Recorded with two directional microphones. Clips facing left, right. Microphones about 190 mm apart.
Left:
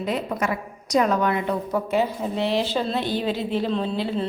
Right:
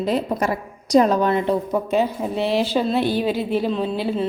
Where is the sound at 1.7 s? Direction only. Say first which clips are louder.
Right 2 dB; 20° right (ahead or behind).